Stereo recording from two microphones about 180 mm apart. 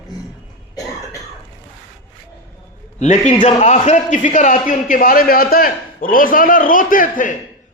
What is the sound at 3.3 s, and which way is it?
A man's voice, 35° left (ahead or behind).